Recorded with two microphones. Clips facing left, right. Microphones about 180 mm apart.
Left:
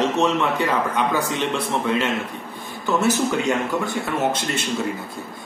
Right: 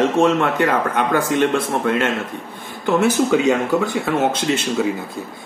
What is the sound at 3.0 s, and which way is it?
Speech, 90° right.